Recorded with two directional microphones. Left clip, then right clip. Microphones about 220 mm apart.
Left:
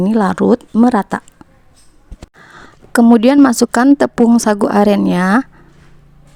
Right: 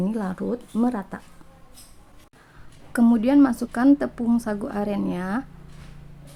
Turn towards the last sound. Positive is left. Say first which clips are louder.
# left 14 dB
turn(degrees=45)  # may be behind; listen again after turning